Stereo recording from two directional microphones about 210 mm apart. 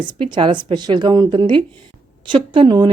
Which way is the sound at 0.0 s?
20° right (ahead or behind).